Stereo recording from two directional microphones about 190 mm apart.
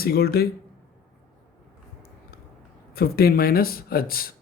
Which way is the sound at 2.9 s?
55° left (ahead or behind).